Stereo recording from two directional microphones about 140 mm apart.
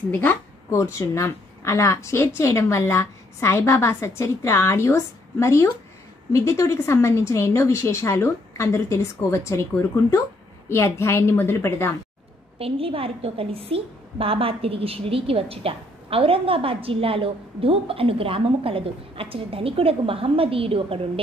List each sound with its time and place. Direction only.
0.1 s a woman's voice: 15° left (ahead or behind)
12.5 s a woman's voice: 45° right (ahead or behind)